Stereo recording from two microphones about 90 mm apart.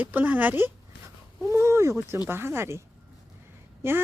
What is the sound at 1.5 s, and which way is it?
Speech, 30° right (ahead or behind).